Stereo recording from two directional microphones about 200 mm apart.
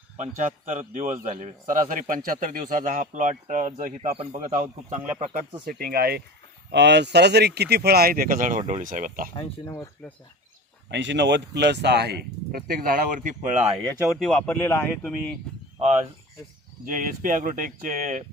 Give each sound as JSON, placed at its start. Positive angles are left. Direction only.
{"t": 0.2, "sound": "a man's voice", "side_deg": -40}
{"t": 9.3, "sound": "speech", "side_deg": 20}
{"t": 10.9, "sound": "speech", "side_deg": -65}
{"t": 13.8, "sound": "speech", "side_deg": -15}
{"t": 14.2, "sound": "speech", "side_deg": 0}
{"t": 15.8, "sound": "a man's voice", "side_deg": -30}